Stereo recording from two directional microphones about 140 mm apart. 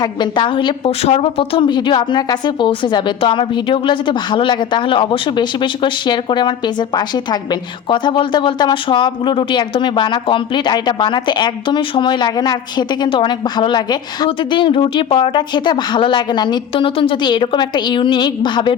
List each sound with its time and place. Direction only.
0.0 s speech: 35° left (ahead or behind)